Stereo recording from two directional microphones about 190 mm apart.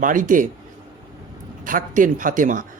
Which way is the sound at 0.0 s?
45° right (ahead or behind).